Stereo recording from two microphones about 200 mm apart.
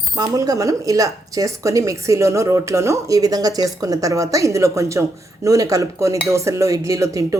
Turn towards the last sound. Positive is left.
turn(degrees=-15)  # may be behind; listen again after turning